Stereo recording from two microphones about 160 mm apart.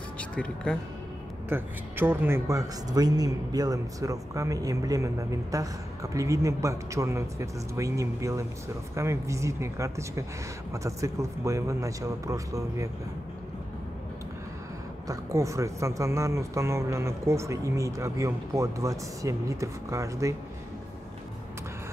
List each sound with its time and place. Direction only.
0.2 s speech: 5° left (ahead or behind)
1.5 s speech: 10° right (ahead or behind)
15.0 s speech: 20° right (ahead or behind)